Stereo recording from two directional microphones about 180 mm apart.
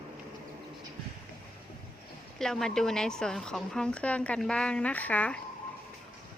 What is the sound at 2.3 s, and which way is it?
A woman's voice, centre (ahead or behind).